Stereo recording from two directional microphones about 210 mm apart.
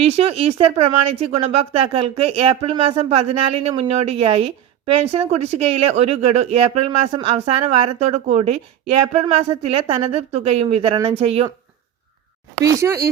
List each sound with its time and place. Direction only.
0.0 s speech: 30° right (ahead or behind)
12.5 s speech: 15° right (ahead or behind)